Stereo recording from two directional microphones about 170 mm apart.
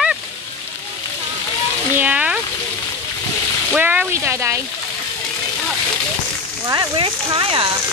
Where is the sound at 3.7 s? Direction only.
10° right (ahead or behind).